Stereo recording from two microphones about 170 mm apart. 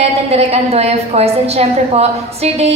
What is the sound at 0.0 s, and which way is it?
A woman's voice, 40° right (ahead or behind).